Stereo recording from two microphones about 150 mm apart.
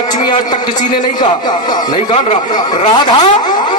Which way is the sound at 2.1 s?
30° left (ahead or behind).